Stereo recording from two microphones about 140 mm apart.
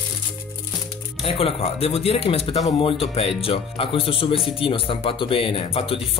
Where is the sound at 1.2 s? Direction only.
45° left (ahead or behind).